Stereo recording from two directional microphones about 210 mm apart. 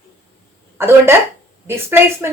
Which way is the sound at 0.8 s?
10° right (ahead or behind).